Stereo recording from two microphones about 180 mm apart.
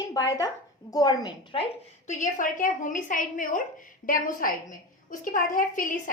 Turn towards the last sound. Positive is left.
turn(degrees=50)  # may be behind; listen again after turning